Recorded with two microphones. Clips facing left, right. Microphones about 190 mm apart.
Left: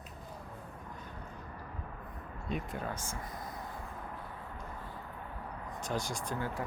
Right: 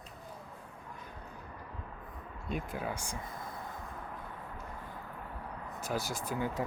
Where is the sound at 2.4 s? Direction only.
Centre (ahead or behind).